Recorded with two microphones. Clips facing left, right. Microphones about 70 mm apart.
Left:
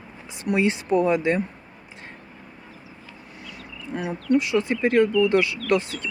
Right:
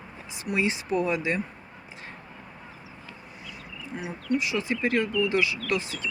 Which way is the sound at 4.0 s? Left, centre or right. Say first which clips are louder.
Left 6 dB; left.